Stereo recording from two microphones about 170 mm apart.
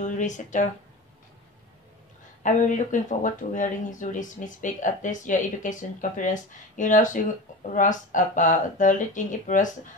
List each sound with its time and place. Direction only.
0.0 s speech: 45° left (ahead or behind)
2.4 s speech: 50° left (ahead or behind)